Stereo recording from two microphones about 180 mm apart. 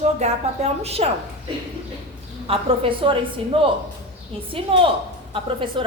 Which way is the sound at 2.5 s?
30° right (ahead or behind).